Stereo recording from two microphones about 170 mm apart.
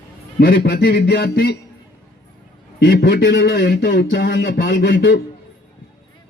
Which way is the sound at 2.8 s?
65° left (ahead or behind).